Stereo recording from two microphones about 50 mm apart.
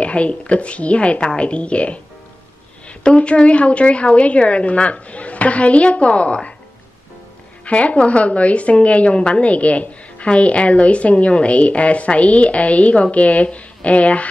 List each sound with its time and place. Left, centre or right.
0.0 s a woman's voice: left
7.6 s a woman's voice: left